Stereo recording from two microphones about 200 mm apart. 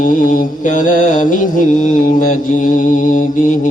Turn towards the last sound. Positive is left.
turn(degrees=40)  # may be behind; listen again after turning